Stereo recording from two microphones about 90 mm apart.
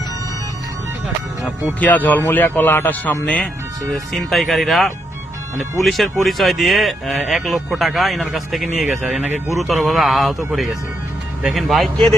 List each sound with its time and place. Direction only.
1.8 s speech: 20° left (ahead or behind); by 11.9 s centre (ahead or behind)